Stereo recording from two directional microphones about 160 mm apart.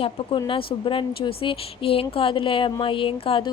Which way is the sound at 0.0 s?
35° left (ahead or behind).